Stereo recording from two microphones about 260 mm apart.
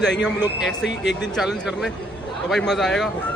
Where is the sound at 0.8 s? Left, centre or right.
Left.